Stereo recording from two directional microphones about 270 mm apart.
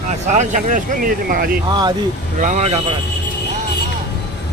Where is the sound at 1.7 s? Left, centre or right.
Centre.